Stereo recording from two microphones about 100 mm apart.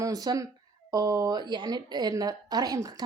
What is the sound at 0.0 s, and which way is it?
A woman's voice, 40° right (ahead or behind).